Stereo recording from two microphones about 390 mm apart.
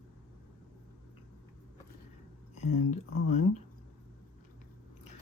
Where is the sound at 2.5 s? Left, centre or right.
Centre.